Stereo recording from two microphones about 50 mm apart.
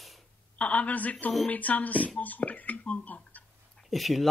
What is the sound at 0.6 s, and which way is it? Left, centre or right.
Speech, left.